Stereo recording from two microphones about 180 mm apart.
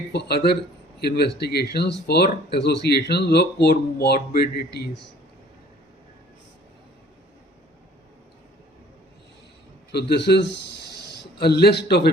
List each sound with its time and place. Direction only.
0.1 s speech: 65° left (ahead or behind)
9.9 s a man's voice: 65° left (ahead or behind)